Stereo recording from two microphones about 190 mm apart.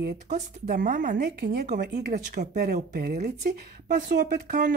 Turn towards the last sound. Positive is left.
turn(degrees=-55)  # may be behind; listen again after turning